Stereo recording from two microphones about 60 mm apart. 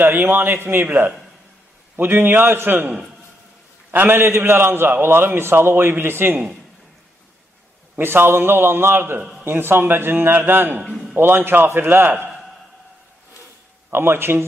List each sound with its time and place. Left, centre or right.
0.0 s a man's voice: right
3.9 s a man's voice: right
7.9 s a man's voice: right
10.8 s a man's voice: centre
11.1 s a man's voice: right
13.8 s a man's voice: right